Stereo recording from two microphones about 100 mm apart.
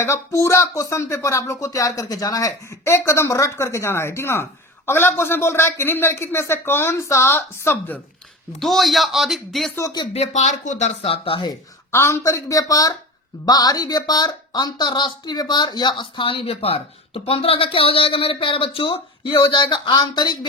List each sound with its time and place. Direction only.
0.0 s a man's voice: 30° left (ahead or behind)
8.5 s speech: centre (ahead or behind)
11.0 s speech: 70° left (ahead or behind)
11.9 s speech: 25° left (ahead or behind); by 20.5 s 45° left (ahead or behind)